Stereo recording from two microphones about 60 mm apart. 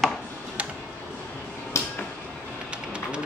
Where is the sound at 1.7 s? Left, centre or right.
Left.